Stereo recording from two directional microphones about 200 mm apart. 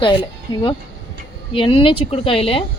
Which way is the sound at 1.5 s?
25° left (ahead or behind).